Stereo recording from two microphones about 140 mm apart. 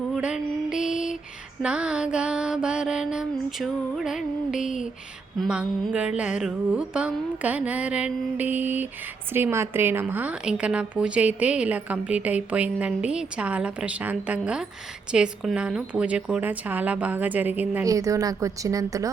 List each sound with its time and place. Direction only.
0.1 s music: 5° right (ahead or behind)
1.6 s mantra: 5° right (ahead or behind)
5.4 s a woman's voice: 5° right (ahead or behind)
17.8 s a woman's voice: 25° right (ahead or behind)